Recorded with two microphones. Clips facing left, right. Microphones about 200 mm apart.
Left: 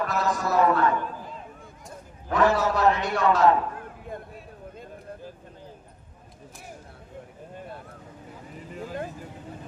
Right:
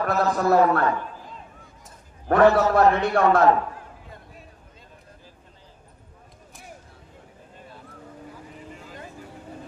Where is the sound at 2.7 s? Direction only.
55° right (ahead or behind).